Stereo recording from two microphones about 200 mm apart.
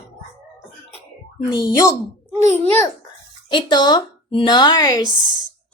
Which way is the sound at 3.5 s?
20° left (ahead or behind).